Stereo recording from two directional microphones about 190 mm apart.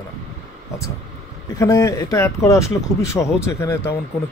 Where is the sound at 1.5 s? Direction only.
15° left (ahead or behind).